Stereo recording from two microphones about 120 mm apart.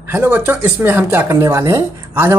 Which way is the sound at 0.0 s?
20° right (ahead or behind).